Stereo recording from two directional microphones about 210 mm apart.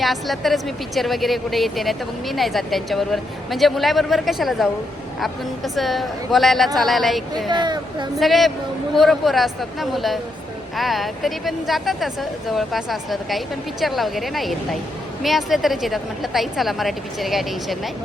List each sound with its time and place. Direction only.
0.0 s a woman's voice: centre (ahead or behind)
7.5 s speech: 20° right (ahead or behind)
8.2 s a woman's voice: centre (ahead or behind)